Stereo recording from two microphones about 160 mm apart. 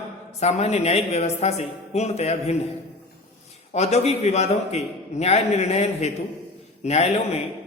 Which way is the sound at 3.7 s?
45° left (ahead or behind).